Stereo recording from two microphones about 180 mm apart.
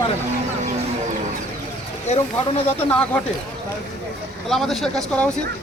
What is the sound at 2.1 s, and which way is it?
Speech, 35° left (ahead or behind).